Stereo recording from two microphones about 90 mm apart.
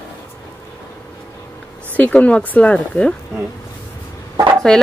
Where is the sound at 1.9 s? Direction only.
15° left (ahead or behind).